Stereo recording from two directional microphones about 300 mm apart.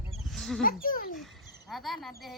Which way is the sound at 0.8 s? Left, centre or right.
Left.